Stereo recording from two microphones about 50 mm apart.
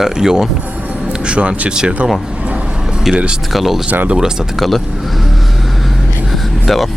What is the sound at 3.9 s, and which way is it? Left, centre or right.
Speech, right.